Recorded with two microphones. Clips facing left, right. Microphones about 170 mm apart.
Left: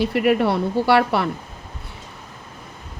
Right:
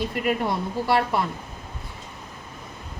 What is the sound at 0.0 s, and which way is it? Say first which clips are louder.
A woman's voice: left 7 dB; 70° left (ahead or behind).